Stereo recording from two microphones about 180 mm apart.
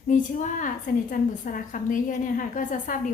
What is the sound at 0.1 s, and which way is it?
A woman's voice, 45° left (ahead or behind).